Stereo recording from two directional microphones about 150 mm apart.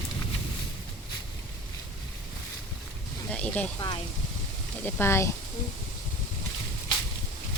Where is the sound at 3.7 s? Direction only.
30° left (ahead or behind).